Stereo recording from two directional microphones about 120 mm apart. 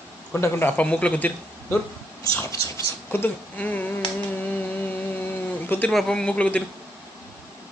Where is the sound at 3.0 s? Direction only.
15° left (ahead or behind).